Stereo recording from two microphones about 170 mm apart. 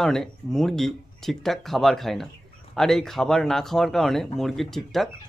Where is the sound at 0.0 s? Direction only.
5° left (ahead or behind).